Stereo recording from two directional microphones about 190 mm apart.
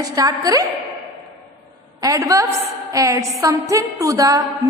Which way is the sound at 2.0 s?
15° right (ahead or behind).